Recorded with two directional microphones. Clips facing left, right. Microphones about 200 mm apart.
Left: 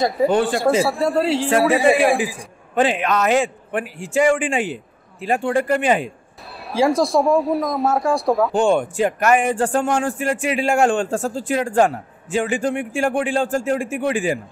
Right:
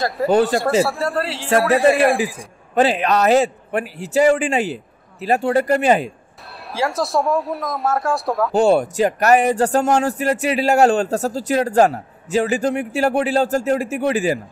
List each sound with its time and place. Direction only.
0.8 s speech: centre (ahead or behind)
2.7 s speech: 35° right (ahead or behind)
6.7 s speech: centre (ahead or behind)
8.5 s speech: 40° right (ahead or behind)